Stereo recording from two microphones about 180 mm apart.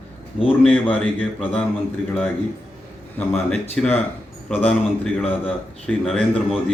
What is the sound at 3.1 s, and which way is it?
A man's voice, 5° left (ahead or behind).